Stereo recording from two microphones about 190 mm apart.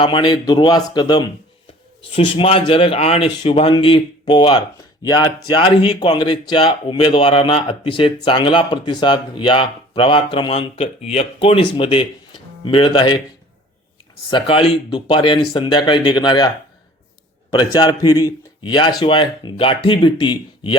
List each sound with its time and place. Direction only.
0.0 s speech: 25° left (ahead or behind)
14.3 s speech: 25° left (ahead or behind)
17.5 s speech: 20° left (ahead or behind)